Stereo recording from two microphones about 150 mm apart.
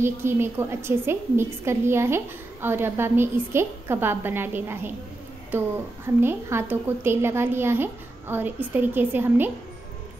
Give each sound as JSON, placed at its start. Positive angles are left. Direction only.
{"t": 0.0, "sound": "a woman's voice", "side_deg": -15}